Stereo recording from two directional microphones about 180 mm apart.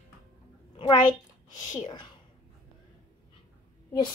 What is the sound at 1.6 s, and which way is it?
Speech, 20° left (ahead or behind).